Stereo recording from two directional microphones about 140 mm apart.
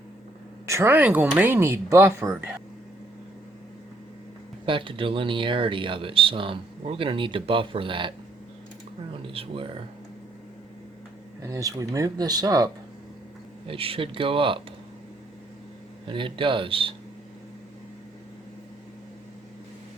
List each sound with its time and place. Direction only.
0.7 s speech: 20° right (ahead or behind)
4.6 s speech: 35° right (ahead or behind)
9.2 s speech: 40° right (ahead or behind)
11.4 s speech: 25° right (ahead or behind)
13.7 s speech: 40° right (ahead or behind)
16.0 s speech: 35° right (ahead or behind)